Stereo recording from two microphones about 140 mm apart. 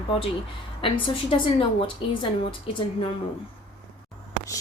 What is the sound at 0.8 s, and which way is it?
A woman's voice, 35° left (ahead or behind).